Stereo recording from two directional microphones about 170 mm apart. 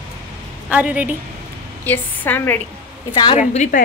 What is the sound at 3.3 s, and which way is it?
Speech, 45° left (ahead or behind).